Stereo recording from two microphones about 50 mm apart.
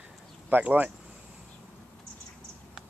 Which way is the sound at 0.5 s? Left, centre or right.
Right.